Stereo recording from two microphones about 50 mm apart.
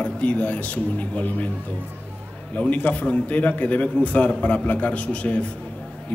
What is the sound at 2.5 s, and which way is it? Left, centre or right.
A man's voice, left.